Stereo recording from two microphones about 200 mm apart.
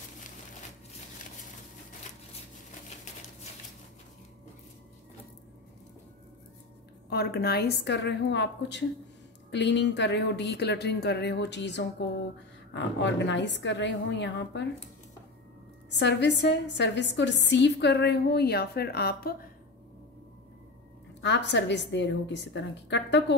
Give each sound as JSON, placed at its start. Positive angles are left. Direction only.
{"t": 7.1, "sound": "a woman's voice", "side_deg": 50}
{"t": 15.9, "sound": "a woman's voice", "side_deg": 60}
{"t": 21.2, "sound": "a woman's voice", "side_deg": 60}